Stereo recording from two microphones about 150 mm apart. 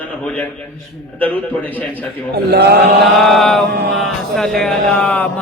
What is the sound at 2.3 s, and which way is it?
Speech, 90° right.